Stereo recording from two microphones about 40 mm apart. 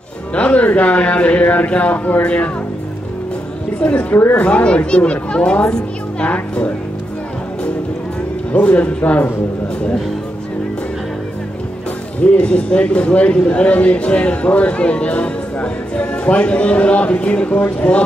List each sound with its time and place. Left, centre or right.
0.3 s music: left
0.7 s a man's voice: left
4.1 s speech: left
4.4 s speech: left
8.6 s a man's voice: left
12.2 s a man's voice: left